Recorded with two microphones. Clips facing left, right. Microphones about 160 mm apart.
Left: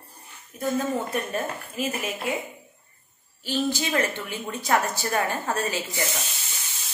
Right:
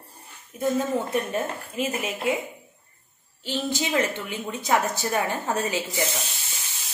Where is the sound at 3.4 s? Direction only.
20° right (ahead or behind).